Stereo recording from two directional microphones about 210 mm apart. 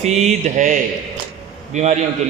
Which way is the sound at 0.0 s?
35° right (ahead or behind).